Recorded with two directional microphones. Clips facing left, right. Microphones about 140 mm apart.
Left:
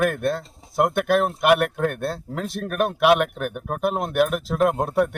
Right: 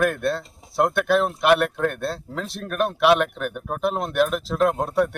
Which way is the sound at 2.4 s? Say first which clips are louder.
Left 3 dB; 50° left (ahead or behind).